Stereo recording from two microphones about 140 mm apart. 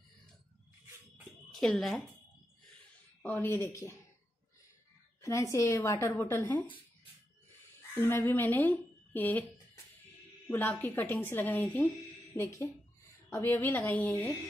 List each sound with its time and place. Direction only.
1.5 s speech: 5° left (ahead or behind)
3.3 s a woman's voice: 15° left (ahead or behind)
5.2 s a woman's voice: 20° left (ahead or behind)
7.9 s speech: 15° left (ahead or behind)
10.5 s a woman's voice: 15° left (ahead or behind)
12.4 s a woman's voice: 20° left (ahead or behind)